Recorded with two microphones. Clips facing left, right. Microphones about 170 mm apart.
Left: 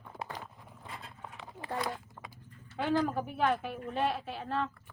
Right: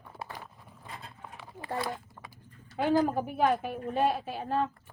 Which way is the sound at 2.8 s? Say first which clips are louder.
Right 4 dB; 40° right (ahead or behind).